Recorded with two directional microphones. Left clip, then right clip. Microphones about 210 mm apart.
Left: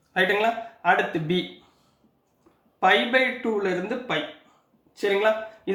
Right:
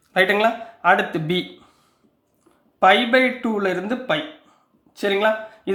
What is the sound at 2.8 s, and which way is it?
Speech, 45° right (ahead or behind).